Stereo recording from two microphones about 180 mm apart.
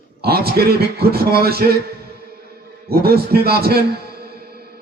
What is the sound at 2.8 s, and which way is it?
A man's voice, 60° right (ahead or behind).